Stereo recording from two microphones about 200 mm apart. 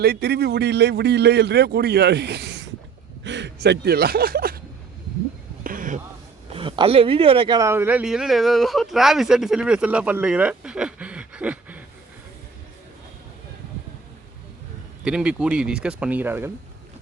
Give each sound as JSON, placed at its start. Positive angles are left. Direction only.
{"t": 0.0, "sound": "a man's voice", "side_deg": -55}
{"t": 5.6, "sound": "a sound", "side_deg": -40}
{"t": 6.5, "sound": "speech", "side_deg": -25}
{"t": 15.0, "sound": "speech", "side_deg": -5}